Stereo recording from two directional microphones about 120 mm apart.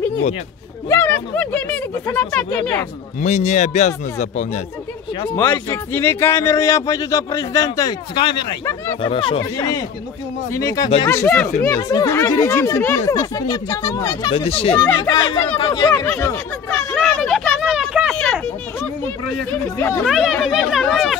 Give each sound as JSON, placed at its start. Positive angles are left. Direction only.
{"t": 0.8, "sound": "speech", "side_deg": 20}
{"t": 3.2, "sound": "speech", "side_deg": 75}
{"t": 5.7, "sound": "speech", "side_deg": 20}
{"t": 9.6, "sound": "speech", "side_deg": 30}
{"t": 14.3, "sound": "speech", "side_deg": 50}
{"t": 15.0, "sound": "speech", "side_deg": 35}
{"t": 16.7, "sound": "a sound", "side_deg": 5}
{"t": 18.1, "sound": "a sound", "side_deg": 5}
{"t": 20.1, "sound": "speech", "side_deg": 0}